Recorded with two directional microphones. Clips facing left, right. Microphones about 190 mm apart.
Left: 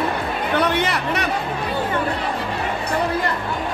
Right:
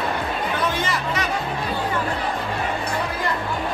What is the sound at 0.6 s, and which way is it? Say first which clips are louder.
Music: left 4 dB; 65° left (ahead or behind).